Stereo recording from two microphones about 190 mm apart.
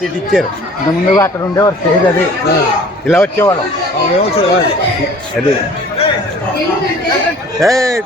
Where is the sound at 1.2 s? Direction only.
15° left (ahead or behind).